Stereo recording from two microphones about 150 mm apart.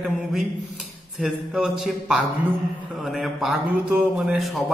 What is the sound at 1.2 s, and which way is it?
A man's voice, 5° right (ahead or behind).